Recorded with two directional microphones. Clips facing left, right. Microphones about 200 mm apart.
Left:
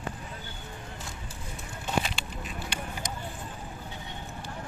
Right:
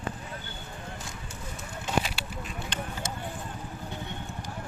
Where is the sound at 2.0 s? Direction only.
5° right (ahead or behind).